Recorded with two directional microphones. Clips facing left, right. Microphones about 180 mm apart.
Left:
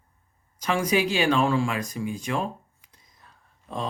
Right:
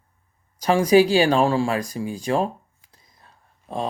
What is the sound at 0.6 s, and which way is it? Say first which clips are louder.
Speech: right 8 dB; 35° right (ahead or behind).